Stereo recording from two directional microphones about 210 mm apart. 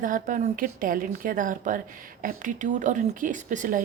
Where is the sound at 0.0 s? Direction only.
40° right (ahead or behind).